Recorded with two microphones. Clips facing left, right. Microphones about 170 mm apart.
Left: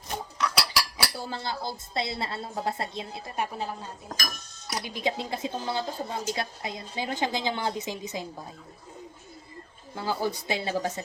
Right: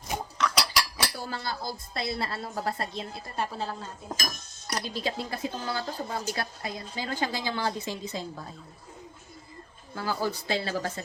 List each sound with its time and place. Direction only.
0.3 s cutlery: 5° left (ahead or behind)
1.3 s a woman's voice: 25° left (ahead or behind)
4.9 s a woman's voice: 20° left (ahead or behind)
9.9 s a woman's voice: 20° left (ahead or behind)